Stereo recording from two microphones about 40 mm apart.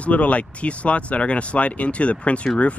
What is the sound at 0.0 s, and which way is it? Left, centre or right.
Speech, left.